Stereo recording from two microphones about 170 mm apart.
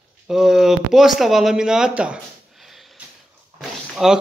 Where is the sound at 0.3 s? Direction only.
Centre (ahead or behind).